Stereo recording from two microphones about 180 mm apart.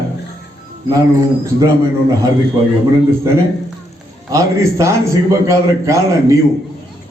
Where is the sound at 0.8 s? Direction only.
20° right (ahead or behind).